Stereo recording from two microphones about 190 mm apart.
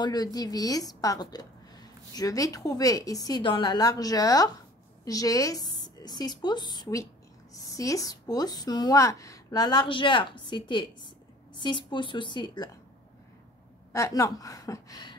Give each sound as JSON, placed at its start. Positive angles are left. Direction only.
{"t": 0.0, "sound": "a woman's voice", "side_deg": 20}
{"t": 13.9, "sound": "a woman's voice", "side_deg": 15}